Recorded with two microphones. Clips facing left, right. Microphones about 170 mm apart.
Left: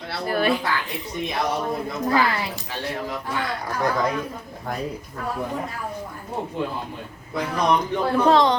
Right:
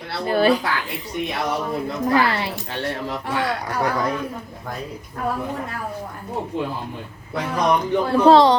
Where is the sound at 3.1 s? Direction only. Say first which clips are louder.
Right 3 dB; 75° right (ahead or behind).